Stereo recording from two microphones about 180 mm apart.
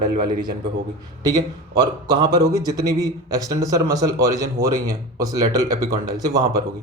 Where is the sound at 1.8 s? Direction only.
25° right (ahead or behind).